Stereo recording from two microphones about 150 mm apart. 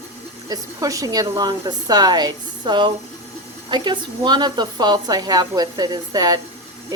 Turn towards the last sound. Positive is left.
turn(degrees=-25)  # may be behind; listen again after turning